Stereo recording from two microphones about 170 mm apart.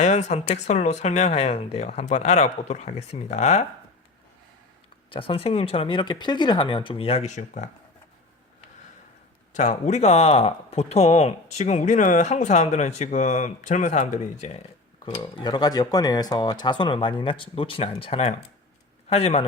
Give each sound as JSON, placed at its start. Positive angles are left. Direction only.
{"t": 0.0, "sound": "speech", "side_deg": 40}
{"t": 5.1, "sound": "speech", "side_deg": 30}
{"t": 9.6, "sound": "speech", "side_deg": 45}
{"t": 15.1, "sound": "a man's voice", "side_deg": 25}